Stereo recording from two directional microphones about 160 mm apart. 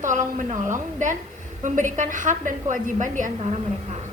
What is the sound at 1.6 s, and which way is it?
A woman's voice, 50° right (ahead or behind).